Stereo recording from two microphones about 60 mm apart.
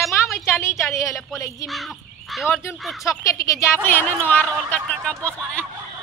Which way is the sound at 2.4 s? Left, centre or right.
Left.